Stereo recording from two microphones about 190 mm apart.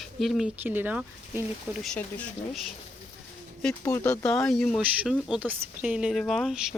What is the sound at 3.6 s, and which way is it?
Speech, 10° left (ahead or behind).